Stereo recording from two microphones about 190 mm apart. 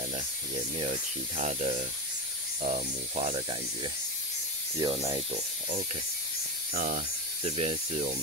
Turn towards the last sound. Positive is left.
turn(degrees=-30)  # may be behind; listen again after turning